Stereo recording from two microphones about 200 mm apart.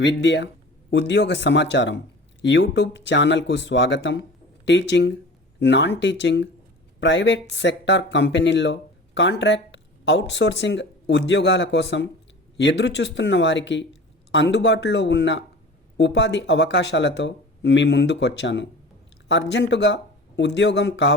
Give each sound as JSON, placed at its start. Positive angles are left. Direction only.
{"t": 0.0, "sound": "speech", "side_deg": 65}